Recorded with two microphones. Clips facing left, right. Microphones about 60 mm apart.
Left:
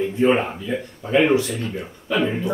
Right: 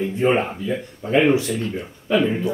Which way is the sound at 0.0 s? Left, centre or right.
Centre.